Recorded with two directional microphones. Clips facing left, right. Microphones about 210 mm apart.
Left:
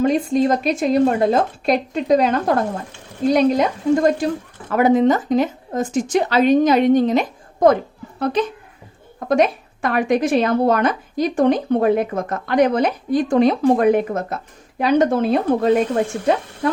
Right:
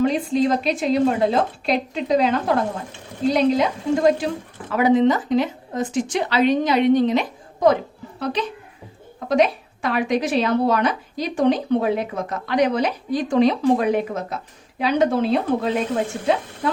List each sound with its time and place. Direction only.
0.0 s a woman's voice: 45° left (ahead or behind)